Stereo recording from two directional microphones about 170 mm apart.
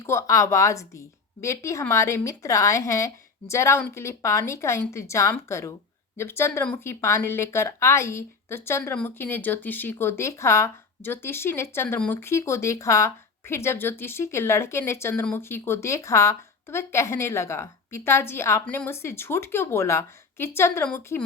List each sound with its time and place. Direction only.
0.0 s speech: 15° left (ahead or behind)